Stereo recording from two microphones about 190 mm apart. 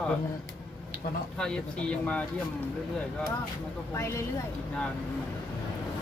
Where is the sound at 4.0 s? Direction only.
15° left (ahead or behind).